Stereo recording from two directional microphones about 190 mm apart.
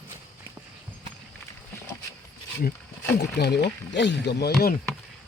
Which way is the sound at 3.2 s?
60° left (ahead or behind).